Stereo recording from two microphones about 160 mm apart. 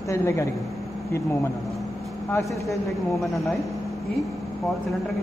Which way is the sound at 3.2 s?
Centre (ahead or behind).